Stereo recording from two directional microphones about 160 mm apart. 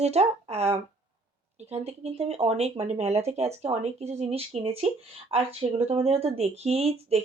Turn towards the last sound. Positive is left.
turn(degrees=-40)  # may be behind; listen again after turning